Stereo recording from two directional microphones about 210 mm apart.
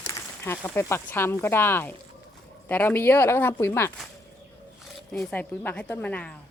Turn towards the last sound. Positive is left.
turn(degrees=10)  # may be behind; listen again after turning